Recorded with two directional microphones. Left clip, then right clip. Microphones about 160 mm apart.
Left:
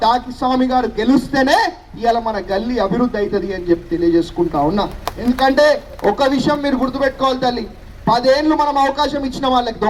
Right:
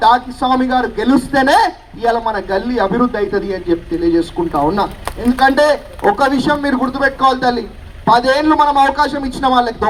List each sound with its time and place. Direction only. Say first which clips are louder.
0.0 s a woman's voice: right 4 dB; 15° left (ahead or behind)